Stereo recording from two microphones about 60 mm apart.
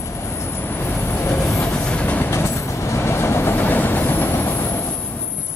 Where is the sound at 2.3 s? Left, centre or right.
Left.